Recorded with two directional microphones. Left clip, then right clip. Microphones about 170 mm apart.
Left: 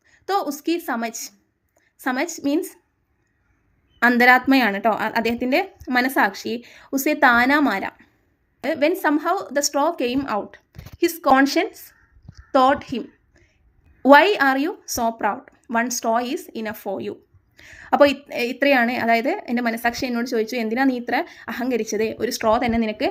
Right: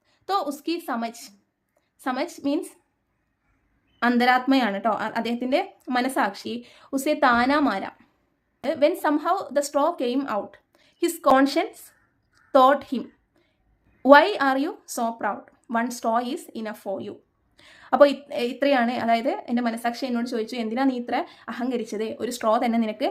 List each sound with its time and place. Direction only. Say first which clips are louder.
0.1 s a sound: left 3 dB; 10° left (ahead or behind)
0.5 s a woman's voice: left 4 dB; 15° left (ahead or behind)
4.0 s a woman's voice: left 6 dB; 15° left (ahead or behind)